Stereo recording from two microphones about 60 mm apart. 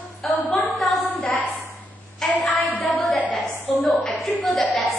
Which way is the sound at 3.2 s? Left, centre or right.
Left.